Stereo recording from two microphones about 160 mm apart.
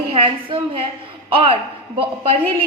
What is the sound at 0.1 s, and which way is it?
A woman's voice, 35° right (ahead or behind).